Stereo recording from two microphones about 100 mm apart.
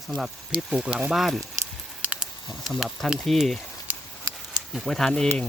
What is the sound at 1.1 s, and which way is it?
Speech, centre (ahead or behind).